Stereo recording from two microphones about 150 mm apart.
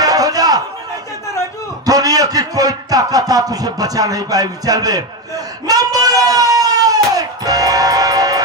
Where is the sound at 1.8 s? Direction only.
25° right (ahead or behind).